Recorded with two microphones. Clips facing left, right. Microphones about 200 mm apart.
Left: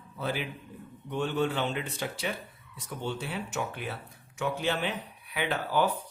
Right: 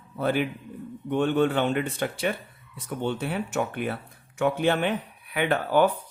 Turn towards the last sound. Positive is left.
turn(degrees=-55)  # may be behind; listen again after turning